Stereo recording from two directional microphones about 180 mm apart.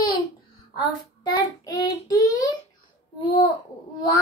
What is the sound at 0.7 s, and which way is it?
Child singing, 20° left (ahead or behind).